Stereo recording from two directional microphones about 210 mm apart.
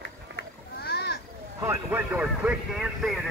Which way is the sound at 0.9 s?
50° left (ahead or behind).